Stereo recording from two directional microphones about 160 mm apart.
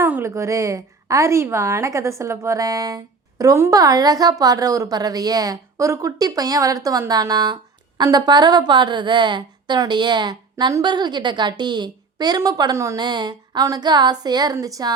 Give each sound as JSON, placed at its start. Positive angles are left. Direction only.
{"t": 0.0, "sound": "a woman's voice", "side_deg": -15}